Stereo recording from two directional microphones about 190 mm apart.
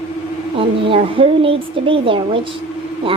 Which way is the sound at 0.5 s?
30° right (ahead or behind).